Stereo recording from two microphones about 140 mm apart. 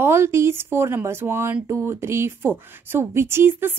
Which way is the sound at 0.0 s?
20° right (ahead or behind).